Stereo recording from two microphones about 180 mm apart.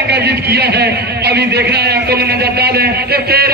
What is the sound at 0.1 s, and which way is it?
Speech, 65° right (ahead or behind).